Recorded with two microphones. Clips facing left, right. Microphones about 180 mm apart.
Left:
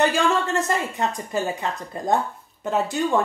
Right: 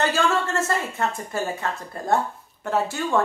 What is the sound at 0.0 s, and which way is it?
Speech, 15° left (ahead or behind).